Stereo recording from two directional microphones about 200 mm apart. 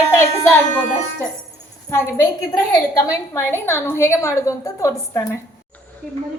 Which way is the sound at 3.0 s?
15° left (ahead or behind).